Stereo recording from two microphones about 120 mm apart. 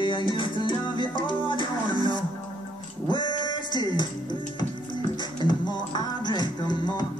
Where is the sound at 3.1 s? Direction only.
35° left (ahead or behind).